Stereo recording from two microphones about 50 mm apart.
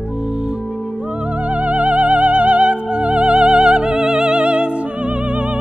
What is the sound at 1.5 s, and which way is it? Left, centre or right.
Music, right.